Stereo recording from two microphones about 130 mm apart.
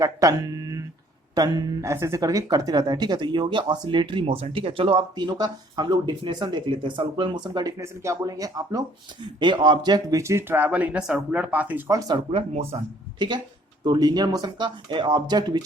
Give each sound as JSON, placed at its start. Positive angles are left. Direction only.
{"t": 0.0, "sound": "speech", "side_deg": -25}
{"t": 7.8, "sound": "speech", "side_deg": -20}
{"t": 11.9, "sound": "speech", "side_deg": -25}
{"t": 12.1, "sound": "speech", "side_deg": -50}
{"t": 13.1, "sound": "speech", "side_deg": -35}